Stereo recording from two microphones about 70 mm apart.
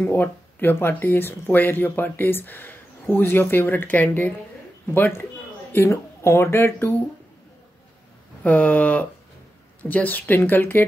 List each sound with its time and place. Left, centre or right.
0.0 s speech: left
5.9 s speech: left
8.5 s speech: left